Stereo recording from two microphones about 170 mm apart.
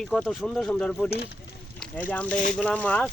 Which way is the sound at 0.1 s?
Centre (ahead or behind).